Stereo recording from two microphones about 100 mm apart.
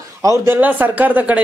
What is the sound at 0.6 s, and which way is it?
Speech, 20° right (ahead or behind).